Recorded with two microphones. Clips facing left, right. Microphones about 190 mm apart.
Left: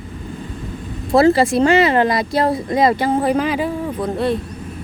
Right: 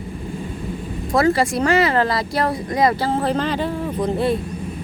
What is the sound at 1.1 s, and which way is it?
Speech, 25° left (ahead or behind).